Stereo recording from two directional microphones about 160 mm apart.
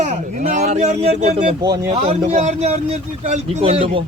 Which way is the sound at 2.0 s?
45° right (ahead or behind).